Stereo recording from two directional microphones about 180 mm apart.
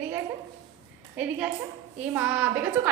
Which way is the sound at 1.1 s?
10° right (ahead or behind).